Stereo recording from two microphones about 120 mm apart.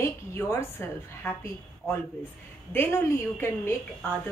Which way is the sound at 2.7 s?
20° left (ahead or behind).